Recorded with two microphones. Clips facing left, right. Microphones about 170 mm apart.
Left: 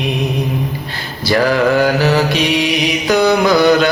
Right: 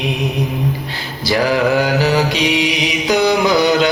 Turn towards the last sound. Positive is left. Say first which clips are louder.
# left 2 dB
turn(degrees=-15)  # may be behind; listen again after turning